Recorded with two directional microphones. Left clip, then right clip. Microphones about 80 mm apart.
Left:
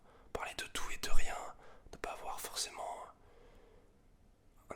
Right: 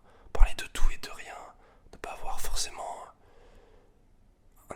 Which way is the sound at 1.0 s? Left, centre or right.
Centre.